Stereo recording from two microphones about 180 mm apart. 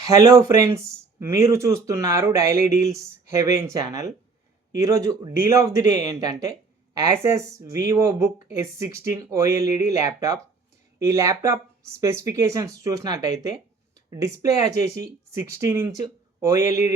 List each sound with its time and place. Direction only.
0.0 s speech: 20° right (ahead or behind)